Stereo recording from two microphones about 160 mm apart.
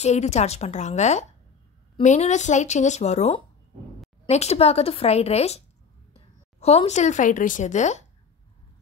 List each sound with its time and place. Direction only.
0.0 s a woman's voice: 45° left (ahead or behind)